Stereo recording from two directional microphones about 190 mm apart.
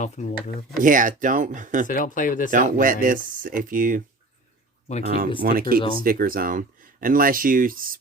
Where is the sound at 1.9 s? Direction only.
45° left (ahead or behind).